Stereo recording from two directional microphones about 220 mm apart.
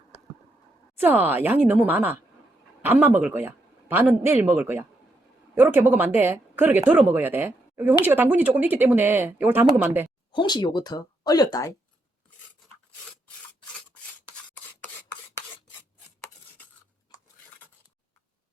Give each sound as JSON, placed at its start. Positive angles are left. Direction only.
{"t": 0.9, "sound": "speech", "side_deg": -10}
{"t": 10.3, "sound": "speech", "side_deg": 20}